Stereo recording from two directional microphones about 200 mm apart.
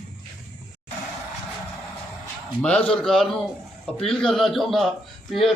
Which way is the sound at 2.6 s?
5° left (ahead or behind).